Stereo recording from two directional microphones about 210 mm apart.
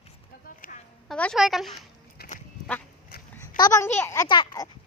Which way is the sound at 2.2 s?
50° left (ahead or behind).